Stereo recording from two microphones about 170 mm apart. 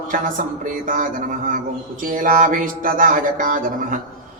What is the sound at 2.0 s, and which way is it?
Speech, 55° right (ahead or behind).